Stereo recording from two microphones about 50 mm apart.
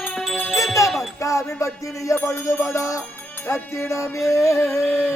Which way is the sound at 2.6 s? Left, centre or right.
Left.